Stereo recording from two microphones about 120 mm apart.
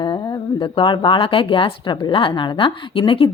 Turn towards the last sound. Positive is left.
turn(degrees=45)  # may be behind; listen again after turning